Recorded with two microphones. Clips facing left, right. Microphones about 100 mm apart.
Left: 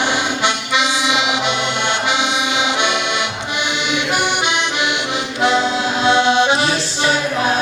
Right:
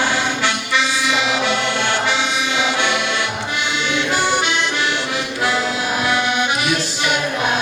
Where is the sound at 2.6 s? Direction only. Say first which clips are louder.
Left 1 dB; 20° left (ahead or behind).